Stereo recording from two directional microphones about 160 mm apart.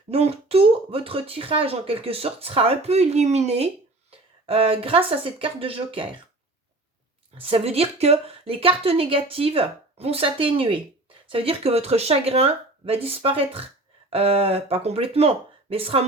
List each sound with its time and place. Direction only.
0.1 s speech: 40° right (ahead or behind)
7.3 s speech: 35° right (ahead or behind)